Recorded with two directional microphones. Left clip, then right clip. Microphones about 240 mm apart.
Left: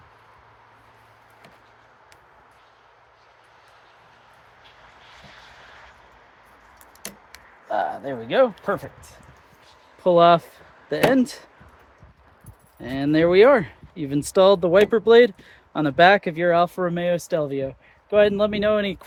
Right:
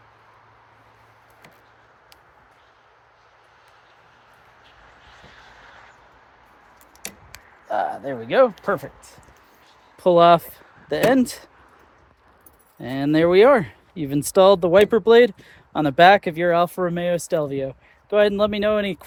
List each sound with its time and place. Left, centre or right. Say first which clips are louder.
5.0 s a sound: left 1 dB; left
7.7 s speech: right 1 dB; centre
10.0 s speech: right 1 dB; right
12.8 s speech: right 1 dB; right